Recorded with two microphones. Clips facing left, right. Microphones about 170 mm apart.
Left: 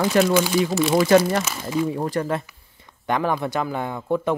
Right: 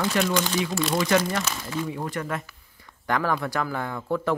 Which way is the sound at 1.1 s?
40° left (ahead or behind).